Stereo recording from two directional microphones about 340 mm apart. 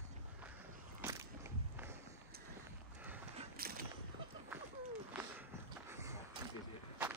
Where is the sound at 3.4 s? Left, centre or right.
Right.